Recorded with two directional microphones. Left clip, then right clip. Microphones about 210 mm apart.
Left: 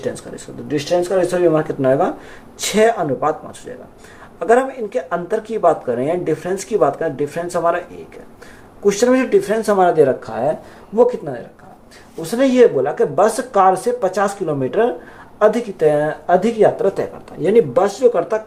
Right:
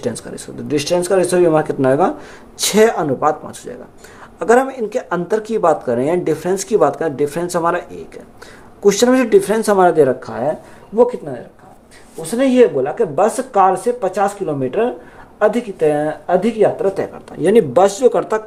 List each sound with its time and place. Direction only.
0.0 s speech: 50° right (ahead or behind)
4.4 s speech: 40° right (ahead or behind); by 10.5 s 25° right (ahead or behind)
10.9 s speech: 5° right (ahead or behind)
17.4 s speech: 35° right (ahead or behind)